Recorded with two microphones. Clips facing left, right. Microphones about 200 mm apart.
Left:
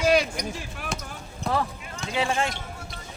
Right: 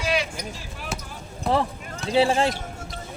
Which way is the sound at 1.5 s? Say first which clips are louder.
Right 4 dB; centre (ahead or behind).